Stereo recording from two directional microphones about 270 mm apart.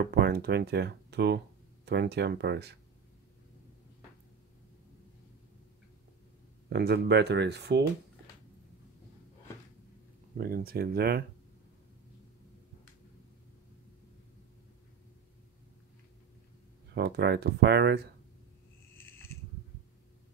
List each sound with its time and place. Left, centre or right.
0.1 s speech: right
6.7 s speech: right
10.3 s speech: right
16.9 s speech: right
18.9 s a sound: centre